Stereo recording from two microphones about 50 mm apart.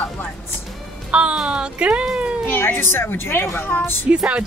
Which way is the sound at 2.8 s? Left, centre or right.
Left.